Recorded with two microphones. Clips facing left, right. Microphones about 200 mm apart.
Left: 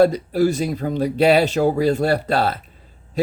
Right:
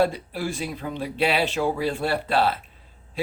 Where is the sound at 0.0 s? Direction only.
40° left (ahead or behind).